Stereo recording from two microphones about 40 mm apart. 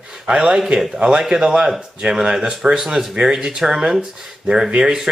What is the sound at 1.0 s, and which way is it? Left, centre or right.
Speech, centre.